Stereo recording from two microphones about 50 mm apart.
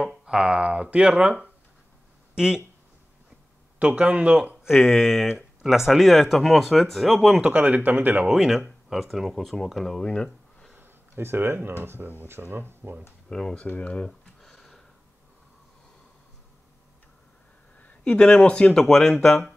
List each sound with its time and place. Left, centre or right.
0.0 s speech: centre
2.3 s speech: centre
3.8 s speech: right
4.8 s speech: centre
7.2 s speech: centre
7.4 s speech: right
8.3 s speech: centre
10.7 s a sound: right
11.8 s speech: right
13.3 s speech: centre
13.7 s speech: left
18.0 s speech: centre